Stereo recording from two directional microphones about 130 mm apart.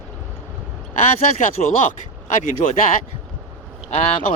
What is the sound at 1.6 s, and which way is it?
Speech, 80° left.